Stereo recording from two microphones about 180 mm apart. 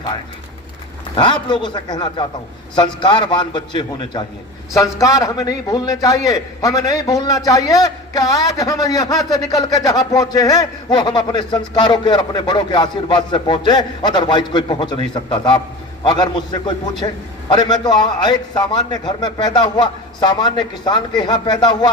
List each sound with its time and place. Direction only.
1.1 s a man's voice: 25° left (ahead or behind)